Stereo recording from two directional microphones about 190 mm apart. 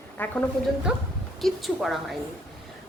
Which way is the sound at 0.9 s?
5° right (ahead or behind).